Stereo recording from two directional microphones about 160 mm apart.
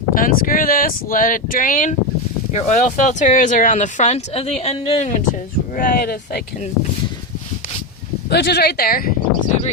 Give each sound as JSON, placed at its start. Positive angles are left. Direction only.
{"t": 0.1, "sound": "speech", "side_deg": 60}
{"t": 5.7, "sound": "speech", "side_deg": 60}
{"t": 8.3, "sound": "speech", "side_deg": 90}